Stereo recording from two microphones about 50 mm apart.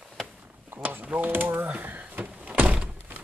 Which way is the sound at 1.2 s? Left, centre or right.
Right.